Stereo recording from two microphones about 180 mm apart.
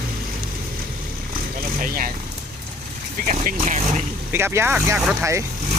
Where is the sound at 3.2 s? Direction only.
45° right (ahead or behind).